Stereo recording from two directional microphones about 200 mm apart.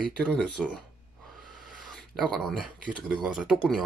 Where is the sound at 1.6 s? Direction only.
Centre (ahead or behind).